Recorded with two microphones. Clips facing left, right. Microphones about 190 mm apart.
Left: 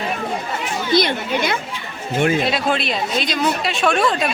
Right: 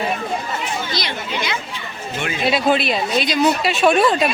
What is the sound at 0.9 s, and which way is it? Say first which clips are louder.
Speech: left 7 dB; 50° left (ahead or behind).